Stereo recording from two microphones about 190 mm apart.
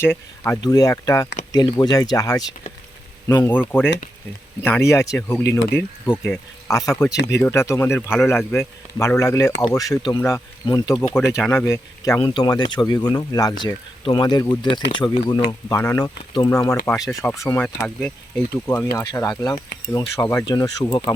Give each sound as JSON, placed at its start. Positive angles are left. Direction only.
{"t": 0.0, "sound": "speech", "side_deg": 10}
{"t": 4.6, "sound": "speech", "side_deg": 15}